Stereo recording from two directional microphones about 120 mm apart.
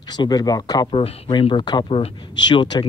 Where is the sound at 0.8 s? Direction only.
55° left (ahead or behind).